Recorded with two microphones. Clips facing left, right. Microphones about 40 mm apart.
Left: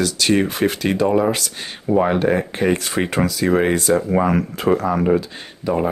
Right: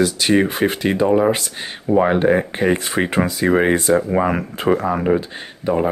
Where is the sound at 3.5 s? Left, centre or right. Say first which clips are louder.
Right 2 dB; centre.